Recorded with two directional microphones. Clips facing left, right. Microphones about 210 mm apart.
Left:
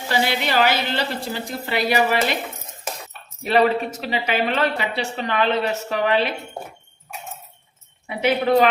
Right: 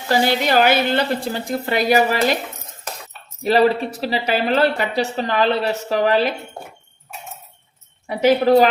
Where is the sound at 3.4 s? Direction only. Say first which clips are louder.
Right 2 dB; 35° right (ahead or behind).